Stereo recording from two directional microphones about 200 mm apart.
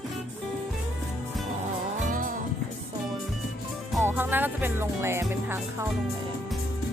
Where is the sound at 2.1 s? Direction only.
40° right (ahead or behind).